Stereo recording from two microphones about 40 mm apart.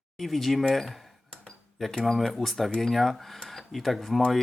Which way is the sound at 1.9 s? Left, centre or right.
Centre.